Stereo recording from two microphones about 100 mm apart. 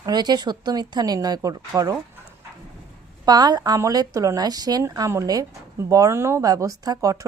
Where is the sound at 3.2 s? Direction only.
40° right (ahead or behind).